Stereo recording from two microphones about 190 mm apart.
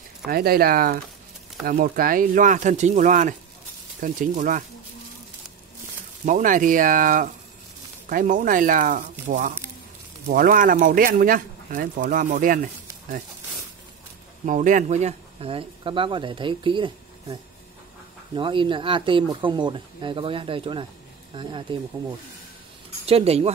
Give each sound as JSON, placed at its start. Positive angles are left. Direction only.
{"t": 0.3, "sound": "speech", "side_deg": -55}
{"t": 6.2, "sound": "speech", "side_deg": -40}
{"t": 10.3, "sound": "speech", "side_deg": -50}
{"t": 14.4, "sound": "speech", "side_deg": -45}
{"t": 23.0, "sound": "speech", "side_deg": -30}